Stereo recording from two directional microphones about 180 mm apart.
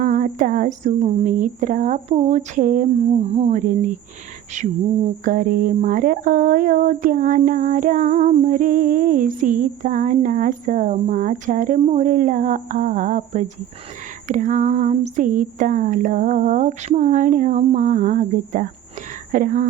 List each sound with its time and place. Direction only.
0.0 s speech: 50° right (ahead or behind)
4.6 s a sound: 40° right (ahead or behind)
5.2 s speech: 50° right (ahead or behind)